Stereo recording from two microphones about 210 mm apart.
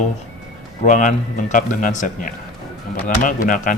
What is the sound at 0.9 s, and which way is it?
Speech, 35° left (ahead or behind).